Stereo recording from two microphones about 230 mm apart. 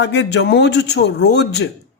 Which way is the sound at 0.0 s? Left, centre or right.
Left.